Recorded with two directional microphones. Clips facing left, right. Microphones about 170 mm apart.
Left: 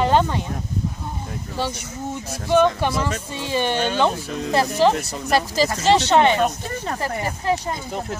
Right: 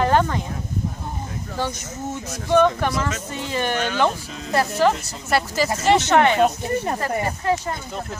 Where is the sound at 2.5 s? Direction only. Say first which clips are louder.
Even; 20° left (ahead or behind).